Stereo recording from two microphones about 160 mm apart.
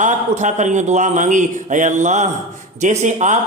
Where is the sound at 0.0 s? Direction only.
50° right (ahead or behind).